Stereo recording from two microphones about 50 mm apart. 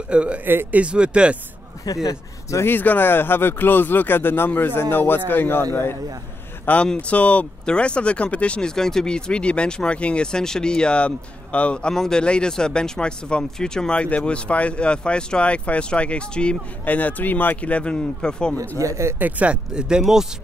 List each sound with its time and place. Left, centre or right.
0.1 s speech: right
2.6 s speech: left
6.8 s speech: left
11.9 s speech: centre
18.8 s speech: right
19.1 s speech: right; by 20.2 s centre